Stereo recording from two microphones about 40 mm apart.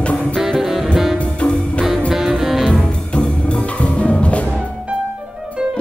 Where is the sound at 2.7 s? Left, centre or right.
Left.